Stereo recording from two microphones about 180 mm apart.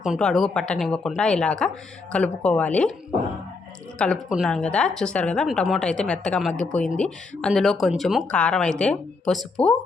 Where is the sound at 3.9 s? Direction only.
5° left (ahead or behind).